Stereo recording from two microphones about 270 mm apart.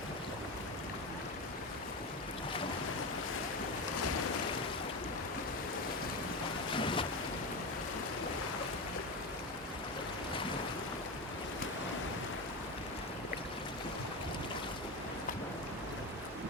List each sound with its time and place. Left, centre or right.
6.7 s boat: centre